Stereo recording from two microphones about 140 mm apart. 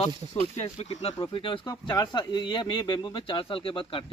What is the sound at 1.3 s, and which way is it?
Speech, 35° left (ahead or behind).